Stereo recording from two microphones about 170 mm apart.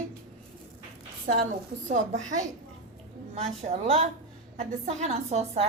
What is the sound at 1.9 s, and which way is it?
Speech, 45° right (ahead or behind).